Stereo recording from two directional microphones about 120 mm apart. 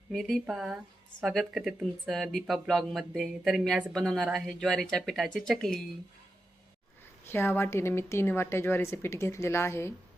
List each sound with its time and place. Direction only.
0.1 s speech: 5° left (ahead or behind)
7.3 s a woman's voice: 20° left (ahead or behind)